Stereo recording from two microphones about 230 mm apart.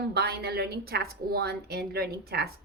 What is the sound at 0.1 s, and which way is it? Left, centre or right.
A woman's voice, right.